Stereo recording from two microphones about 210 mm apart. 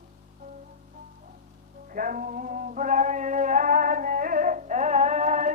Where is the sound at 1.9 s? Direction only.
40° right (ahead or behind).